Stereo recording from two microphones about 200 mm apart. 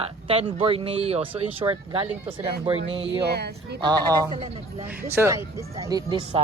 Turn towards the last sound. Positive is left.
turn(degrees=-25)  # may be behind; listen again after turning